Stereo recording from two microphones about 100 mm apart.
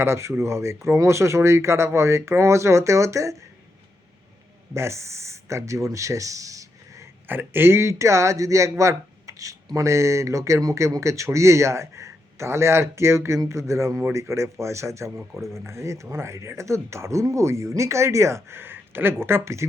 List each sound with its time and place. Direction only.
0.0 s speech: 25° right (ahead or behind)
4.7 s speech: 30° right (ahead or behind)
7.3 s speech: 20° right (ahead or behind)
8.8 s a sound: 30° right (ahead or behind)
9.7 s speech: 30° right (ahead or behind)